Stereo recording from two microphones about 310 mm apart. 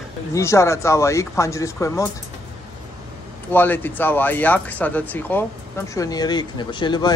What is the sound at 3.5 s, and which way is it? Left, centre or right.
Speech, centre.